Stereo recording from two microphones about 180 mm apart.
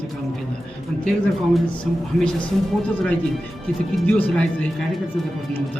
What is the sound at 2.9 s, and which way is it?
A man's voice, 10° left (ahead or behind).